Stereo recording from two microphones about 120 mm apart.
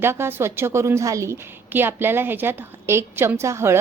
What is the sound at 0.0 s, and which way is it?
A woman's voice, 20° right (ahead or behind).